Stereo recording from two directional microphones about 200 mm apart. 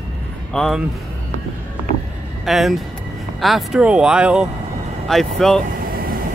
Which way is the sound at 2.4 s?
Centre (ahead or behind).